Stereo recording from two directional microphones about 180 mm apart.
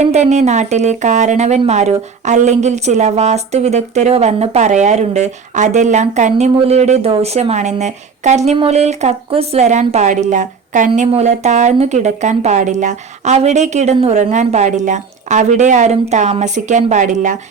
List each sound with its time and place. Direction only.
0.0 s speech: 40° right (ahead or behind)